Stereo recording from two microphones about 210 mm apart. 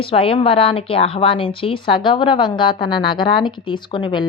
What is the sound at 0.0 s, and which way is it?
A woman's voice, 25° left (ahead or behind).